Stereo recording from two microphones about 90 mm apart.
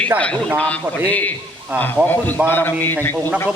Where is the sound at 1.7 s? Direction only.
20° right (ahead or behind).